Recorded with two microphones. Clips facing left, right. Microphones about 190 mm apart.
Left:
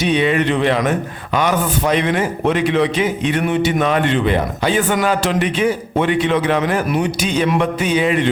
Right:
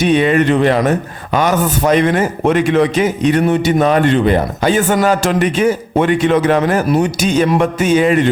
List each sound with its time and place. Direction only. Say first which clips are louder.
0.0 s a man's voice: right 4 dB; 45° right (ahead or behind)